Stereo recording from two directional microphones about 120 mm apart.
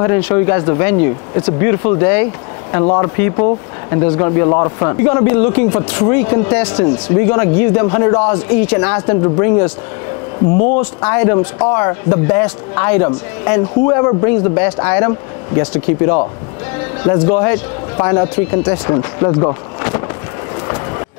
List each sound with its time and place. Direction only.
0.0 s speech: 25° left (ahead or behind)